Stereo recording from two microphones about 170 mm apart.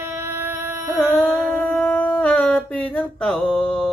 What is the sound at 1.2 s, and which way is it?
Music, 10° right (ahead or behind).